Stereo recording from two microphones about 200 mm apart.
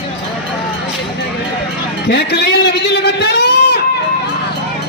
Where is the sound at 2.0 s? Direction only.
55° left (ahead or behind).